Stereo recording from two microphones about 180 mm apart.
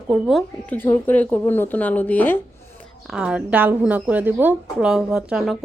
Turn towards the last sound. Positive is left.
turn(degrees=-5)  # may be behind; listen again after turning